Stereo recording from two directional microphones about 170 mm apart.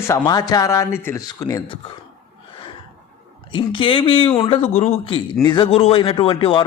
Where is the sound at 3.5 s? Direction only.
30° left (ahead or behind).